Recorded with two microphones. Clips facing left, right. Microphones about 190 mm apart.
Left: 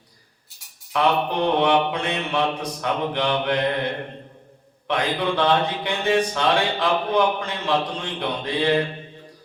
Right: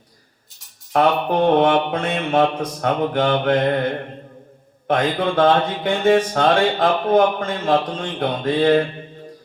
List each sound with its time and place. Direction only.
0.9 s speech: 45° right (ahead or behind)